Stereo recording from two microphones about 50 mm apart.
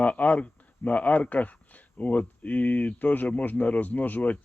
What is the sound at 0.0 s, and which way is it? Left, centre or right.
Speech, left.